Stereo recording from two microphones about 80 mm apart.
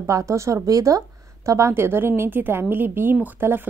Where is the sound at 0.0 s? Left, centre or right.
Right.